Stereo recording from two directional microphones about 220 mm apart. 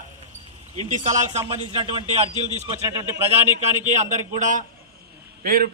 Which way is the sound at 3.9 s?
30° right (ahead or behind).